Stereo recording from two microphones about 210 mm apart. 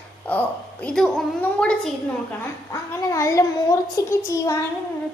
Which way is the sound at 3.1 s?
15° left (ahead or behind).